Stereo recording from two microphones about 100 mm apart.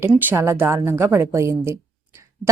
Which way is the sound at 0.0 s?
25° right (ahead or behind).